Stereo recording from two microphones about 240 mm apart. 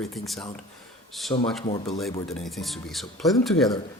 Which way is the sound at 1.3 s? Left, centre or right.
Centre.